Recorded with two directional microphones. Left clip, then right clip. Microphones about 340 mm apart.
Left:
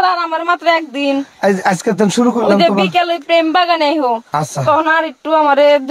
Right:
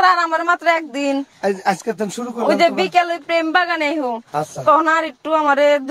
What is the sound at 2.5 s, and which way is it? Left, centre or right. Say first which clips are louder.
A woman's voice: even; right.